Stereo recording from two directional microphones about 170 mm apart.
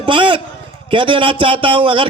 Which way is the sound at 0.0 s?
30° right (ahead or behind).